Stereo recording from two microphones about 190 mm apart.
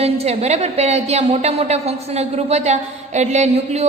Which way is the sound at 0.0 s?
35° right (ahead or behind).